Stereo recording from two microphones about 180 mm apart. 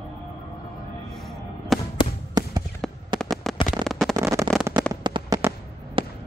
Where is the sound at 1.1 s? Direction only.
Centre (ahead or behind).